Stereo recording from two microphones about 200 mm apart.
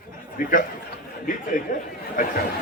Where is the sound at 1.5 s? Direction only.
40° left (ahead or behind).